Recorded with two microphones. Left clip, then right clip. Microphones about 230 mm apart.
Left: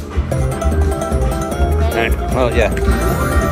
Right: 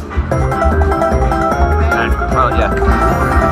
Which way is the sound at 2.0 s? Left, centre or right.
Left.